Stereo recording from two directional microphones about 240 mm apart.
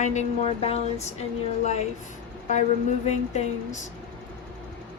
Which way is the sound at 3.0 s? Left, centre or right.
Left.